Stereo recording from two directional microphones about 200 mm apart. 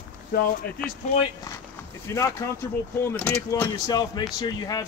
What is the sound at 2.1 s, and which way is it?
Speech, 15° left (ahead or behind).